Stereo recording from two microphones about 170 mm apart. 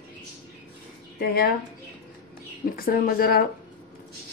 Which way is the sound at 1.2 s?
65° left (ahead or behind).